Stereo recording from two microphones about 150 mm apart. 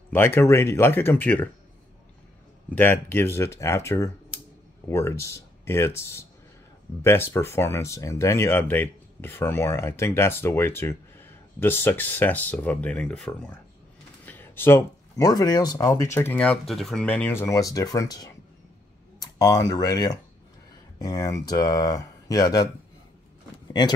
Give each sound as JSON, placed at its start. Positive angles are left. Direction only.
{"t": 0.1, "sound": "speech", "side_deg": 15}
{"t": 2.7, "sound": "speech", "side_deg": 15}
{"t": 16.3, "sound": "speech", "side_deg": 5}